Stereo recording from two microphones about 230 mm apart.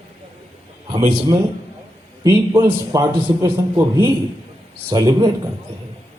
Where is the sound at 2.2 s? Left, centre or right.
Centre.